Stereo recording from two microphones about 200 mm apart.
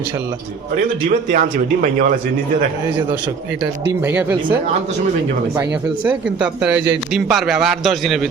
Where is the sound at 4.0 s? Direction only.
10° right (ahead or behind).